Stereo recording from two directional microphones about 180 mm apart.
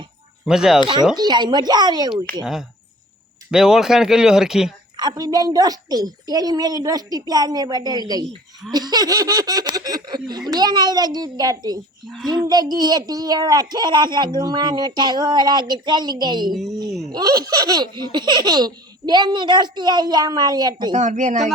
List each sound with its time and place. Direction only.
0.4 s speech: 5° right (ahead or behind)
1.1 s a child's voice: 25° right (ahead or behind)
2.4 s speech: centre (ahead or behind)
4.9 s a child's voice: 20° right (ahead or behind)
12.0 s speech: centre (ahead or behind)
12.5 s a child's voice: 20° right (ahead or behind)
16.5 s speech: centre (ahead or behind)
17.1 s a child's voice: 20° right (ahead or behind)
20.9 s speech: 40° right (ahead or behind)